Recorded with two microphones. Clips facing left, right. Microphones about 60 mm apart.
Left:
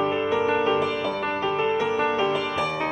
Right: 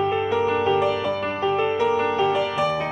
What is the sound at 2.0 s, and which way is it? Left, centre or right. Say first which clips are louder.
Music: right 2 dB; centre.